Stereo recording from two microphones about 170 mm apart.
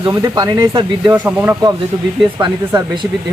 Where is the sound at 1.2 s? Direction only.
10° right (ahead or behind).